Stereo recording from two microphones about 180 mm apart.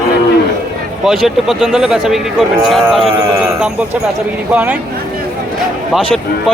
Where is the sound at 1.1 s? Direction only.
Centre (ahead or behind).